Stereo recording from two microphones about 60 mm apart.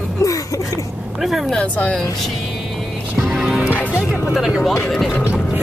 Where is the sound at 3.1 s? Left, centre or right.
Centre.